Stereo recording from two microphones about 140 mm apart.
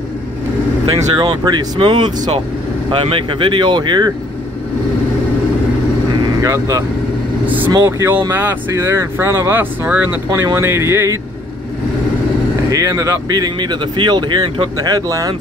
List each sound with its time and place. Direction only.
1.1 s speech: 35° right (ahead or behind)
6.4 s speech: 20° right (ahead or behind)
7.7 s speech: 25° right (ahead or behind)
8.3 s speech: 10° right (ahead or behind)
12.6 s speech: 25° right (ahead or behind)